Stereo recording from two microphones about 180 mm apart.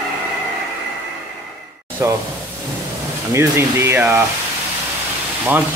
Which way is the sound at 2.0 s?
15° right (ahead or behind).